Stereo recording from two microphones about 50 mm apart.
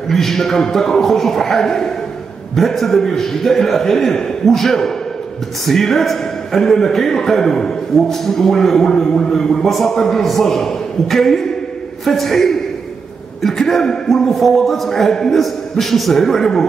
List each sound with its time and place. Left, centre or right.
0.1 s a man's voice: centre